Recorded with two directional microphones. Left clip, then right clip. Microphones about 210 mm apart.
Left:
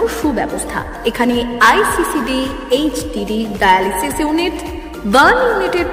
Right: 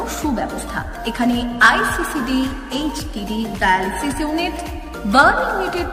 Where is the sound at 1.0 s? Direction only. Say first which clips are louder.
Left 6 dB; 15° left (ahead or behind).